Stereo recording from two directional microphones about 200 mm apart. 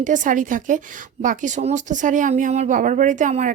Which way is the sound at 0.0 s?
40° right (ahead or behind).